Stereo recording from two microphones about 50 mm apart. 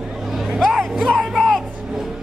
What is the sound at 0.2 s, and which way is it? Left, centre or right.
Vehicle, centre.